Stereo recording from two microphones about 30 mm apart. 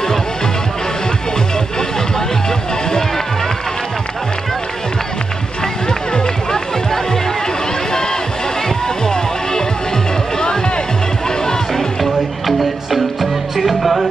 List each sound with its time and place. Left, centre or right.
5.9 s music: left
8.6 s music: left
11.7 s music: centre